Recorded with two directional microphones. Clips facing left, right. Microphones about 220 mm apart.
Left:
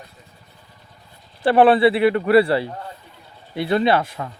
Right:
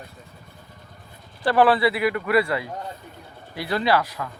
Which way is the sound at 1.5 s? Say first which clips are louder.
Left 5 dB; 25° left (ahead or behind).